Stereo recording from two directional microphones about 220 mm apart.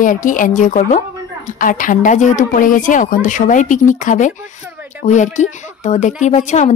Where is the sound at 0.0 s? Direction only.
35° left (ahead or behind).